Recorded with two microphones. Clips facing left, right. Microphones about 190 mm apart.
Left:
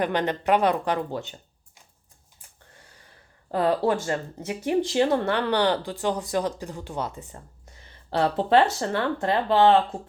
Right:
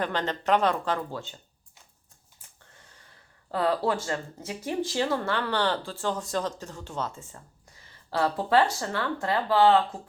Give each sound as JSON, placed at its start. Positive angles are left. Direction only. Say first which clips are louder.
{"t": 0.0, "sound": "speech", "louder": "left 4 dB", "side_deg": 15}
{"t": 3.5, "sound": "speech", "louder": "left 3 dB", "side_deg": 20}